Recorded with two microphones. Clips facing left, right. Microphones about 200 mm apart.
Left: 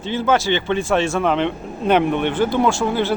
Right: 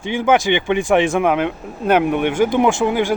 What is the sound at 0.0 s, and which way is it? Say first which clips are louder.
Speech: right 2 dB; 15° right (ahead or behind).